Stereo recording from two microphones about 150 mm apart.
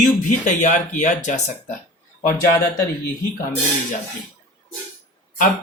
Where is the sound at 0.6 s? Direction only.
55° left (ahead or behind).